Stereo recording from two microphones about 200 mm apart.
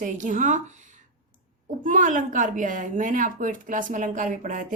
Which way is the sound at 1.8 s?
40° right (ahead or behind).